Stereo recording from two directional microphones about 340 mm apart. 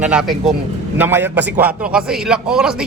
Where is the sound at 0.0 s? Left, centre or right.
Centre.